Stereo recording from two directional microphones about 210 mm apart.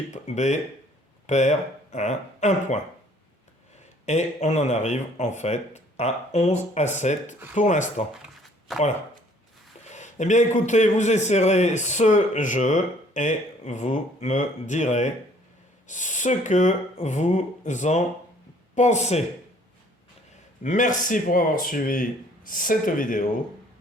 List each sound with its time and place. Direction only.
0.1 s a man's voice: 35° left (ahead or behind)
4.0 s a man's voice: 35° left (ahead or behind)
8.1 s shuffling cards: centre (ahead or behind)
9.8 s a man's voice: 35° left (ahead or behind)
20.6 s a man's voice: 40° left (ahead or behind)